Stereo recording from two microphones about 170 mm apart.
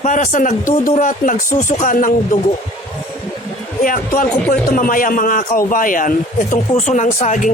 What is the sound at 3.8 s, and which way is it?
Speech, 55° left (ahead or behind).